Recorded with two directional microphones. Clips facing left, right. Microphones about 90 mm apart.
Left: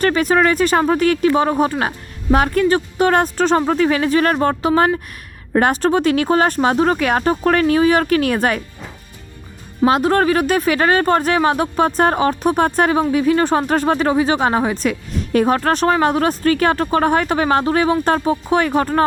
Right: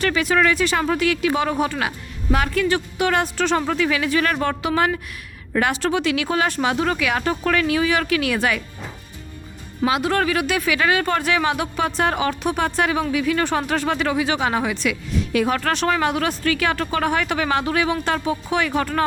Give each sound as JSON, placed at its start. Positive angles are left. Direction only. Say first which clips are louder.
{"t": 0.0, "sound": "speech", "louder": "left 4 dB", "side_deg": 40}
{"t": 9.8, "sound": "speech", "louder": "left 6 dB", "side_deg": 40}